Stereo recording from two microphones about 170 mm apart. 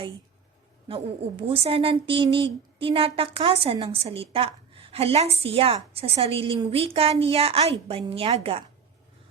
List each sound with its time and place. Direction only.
0.9 s a woman's voice: 35° right (ahead or behind)